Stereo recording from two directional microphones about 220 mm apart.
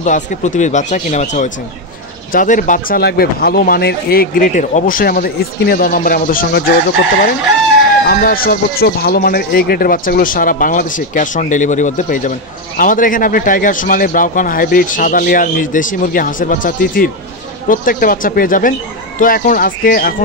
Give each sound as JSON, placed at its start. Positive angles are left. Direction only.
{"t": 0.0, "sound": "speech", "side_deg": 35}
{"t": 8.1, "sound": "speech", "side_deg": 40}